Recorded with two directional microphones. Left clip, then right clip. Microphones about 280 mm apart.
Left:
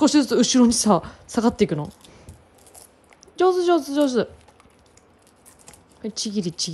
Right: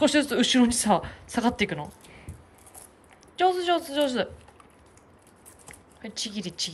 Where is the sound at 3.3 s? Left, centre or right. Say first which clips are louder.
Left 5 dB; left.